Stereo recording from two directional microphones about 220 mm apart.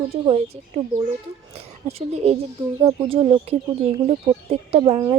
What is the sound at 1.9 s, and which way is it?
A woman's voice, 30° right (ahead or behind).